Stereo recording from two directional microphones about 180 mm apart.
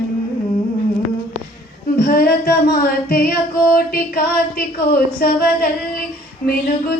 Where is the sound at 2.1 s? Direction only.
55° left (ahead or behind).